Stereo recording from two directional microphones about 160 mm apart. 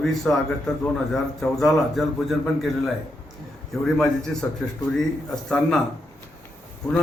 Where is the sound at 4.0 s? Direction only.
5° left (ahead or behind).